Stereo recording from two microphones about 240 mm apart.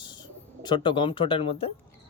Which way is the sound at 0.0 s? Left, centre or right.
Centre.